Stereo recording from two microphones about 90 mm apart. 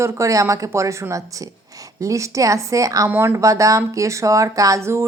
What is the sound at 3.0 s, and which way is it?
Speech, 25° right (ahead or behind).